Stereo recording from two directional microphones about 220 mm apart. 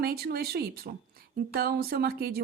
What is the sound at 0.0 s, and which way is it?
Speech, 45° right (ahead or behind).